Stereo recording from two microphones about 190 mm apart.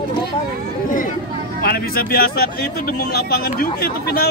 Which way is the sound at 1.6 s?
50° left (ahead or behind).